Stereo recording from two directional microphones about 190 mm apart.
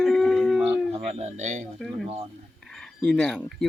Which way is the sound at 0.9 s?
35° right (ahead or behind).